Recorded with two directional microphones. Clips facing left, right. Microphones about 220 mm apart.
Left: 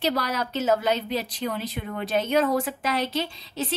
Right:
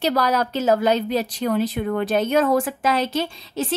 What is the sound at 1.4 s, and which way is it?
A woman's voice, 50° right (ahead or behind).